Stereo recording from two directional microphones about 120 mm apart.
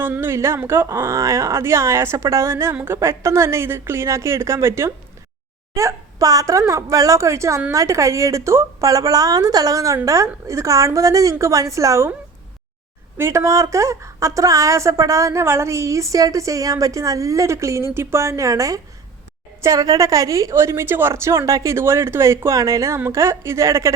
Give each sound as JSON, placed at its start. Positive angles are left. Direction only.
{"t": 0.0, "sound": "a woman's voice", "side_deg": -20}
{"t": 13.1, "sound": "a woman's voice", "side_deg": -20}